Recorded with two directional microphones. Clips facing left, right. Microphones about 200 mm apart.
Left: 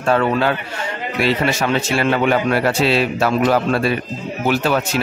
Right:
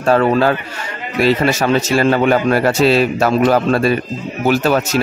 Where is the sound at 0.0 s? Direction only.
40° right (ahead or behind).